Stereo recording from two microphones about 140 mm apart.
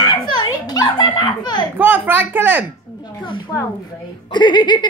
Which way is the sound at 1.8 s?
15° right (ahead or behind).